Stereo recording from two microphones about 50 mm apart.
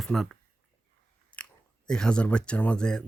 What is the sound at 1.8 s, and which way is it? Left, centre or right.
Speech, centre.